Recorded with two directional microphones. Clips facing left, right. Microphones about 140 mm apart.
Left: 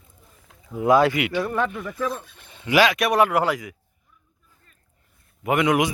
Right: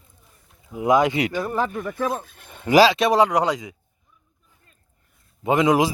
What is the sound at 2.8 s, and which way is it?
Speech, 25° right (ahead or behind).